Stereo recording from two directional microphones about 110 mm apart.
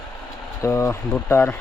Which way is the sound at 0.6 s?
25° left (ahead or behind).